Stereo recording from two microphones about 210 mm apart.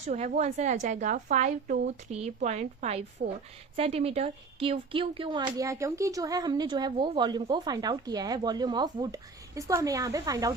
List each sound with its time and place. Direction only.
0.0 s a woman's voice: 35° right (ahead or behind)
3.8 s speech: 30° right (ahead or behind)